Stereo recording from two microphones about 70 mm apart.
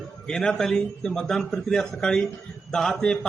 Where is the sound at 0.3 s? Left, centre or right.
Centre.